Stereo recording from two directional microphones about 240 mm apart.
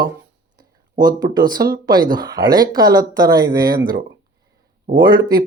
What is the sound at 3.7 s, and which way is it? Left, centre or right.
Speech, right.